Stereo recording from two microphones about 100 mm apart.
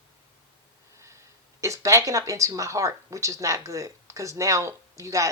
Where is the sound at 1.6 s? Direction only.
30° right (ahead or behind).